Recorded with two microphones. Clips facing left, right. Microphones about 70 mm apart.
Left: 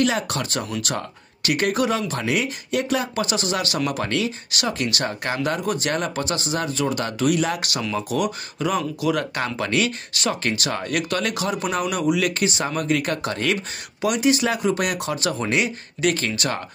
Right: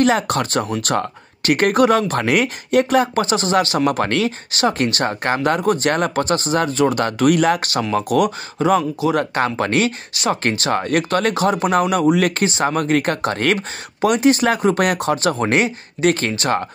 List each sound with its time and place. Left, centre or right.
0.0 s speech: right
4.5 s speech: right
7.6 s speech: right
7.9 s speech: right
8.5 s speech: right
10.1 s speech: right
10.4 s speech: right